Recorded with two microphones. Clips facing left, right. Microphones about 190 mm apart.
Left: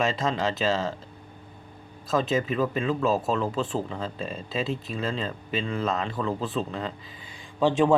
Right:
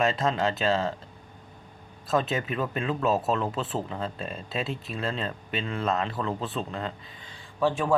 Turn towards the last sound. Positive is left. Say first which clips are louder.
# left 4 dB
turn(degrees=20)  # may be behind; listen again after turning